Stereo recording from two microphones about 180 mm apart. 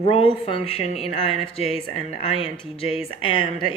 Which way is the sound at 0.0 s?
30° left (ahead or behind).